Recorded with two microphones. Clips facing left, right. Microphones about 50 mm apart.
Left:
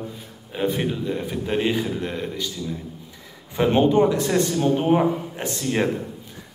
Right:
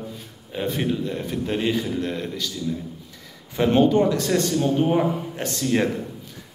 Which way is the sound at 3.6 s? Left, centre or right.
Centre.